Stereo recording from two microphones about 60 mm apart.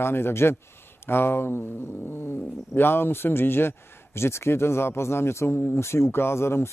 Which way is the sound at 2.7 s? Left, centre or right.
Left.